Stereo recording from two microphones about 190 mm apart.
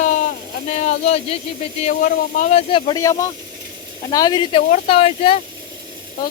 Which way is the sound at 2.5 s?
25° left (ahead or behind).